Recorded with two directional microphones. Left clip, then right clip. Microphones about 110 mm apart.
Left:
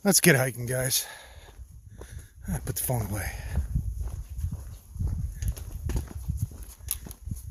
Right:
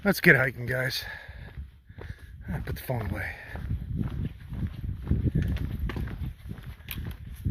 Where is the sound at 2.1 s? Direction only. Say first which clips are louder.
Left 2 dB; 60° left (ahead or behind).